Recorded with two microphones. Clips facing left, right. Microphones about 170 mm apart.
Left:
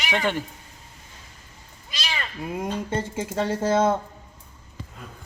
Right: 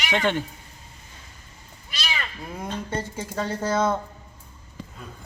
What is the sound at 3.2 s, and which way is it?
Speech, 25° left (ahead or behind).